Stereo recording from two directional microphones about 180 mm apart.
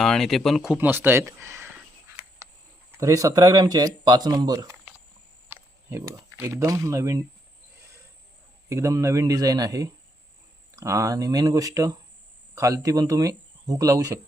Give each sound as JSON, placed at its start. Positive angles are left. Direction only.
{"t": 0.0, "sound": "speech", "side_deg": 0}
{"t": 2.9, "sound": "speech", "side_deg": -20}
{"t": 8.7, "sound": "speech", "side_deg": -15}